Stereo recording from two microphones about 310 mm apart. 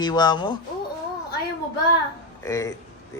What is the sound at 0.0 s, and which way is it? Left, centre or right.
Speech, centre.